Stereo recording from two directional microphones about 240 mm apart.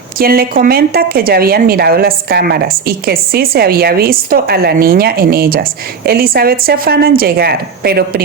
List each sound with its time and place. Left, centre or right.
0.2 s a woman's voice: right